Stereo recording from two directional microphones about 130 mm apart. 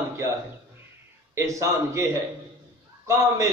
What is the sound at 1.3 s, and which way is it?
Speech, 25° right (ahead or behind).